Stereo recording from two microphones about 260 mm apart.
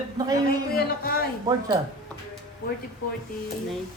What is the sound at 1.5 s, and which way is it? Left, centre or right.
Speech, centre.